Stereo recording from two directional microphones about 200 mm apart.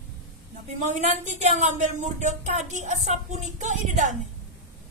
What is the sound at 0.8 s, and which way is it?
Speech, 35° right (ahead or behind).